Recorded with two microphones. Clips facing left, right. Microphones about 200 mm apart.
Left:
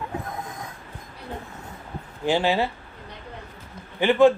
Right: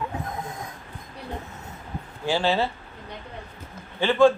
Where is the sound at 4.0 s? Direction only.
15° left (ahead or behind).